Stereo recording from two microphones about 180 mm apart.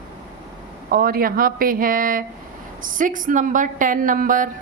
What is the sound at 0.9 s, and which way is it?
A woman's voice, 55° right (ahead or behind).